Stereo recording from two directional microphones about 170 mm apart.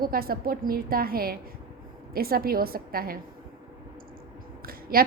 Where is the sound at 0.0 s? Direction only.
60° right (ahead or behind).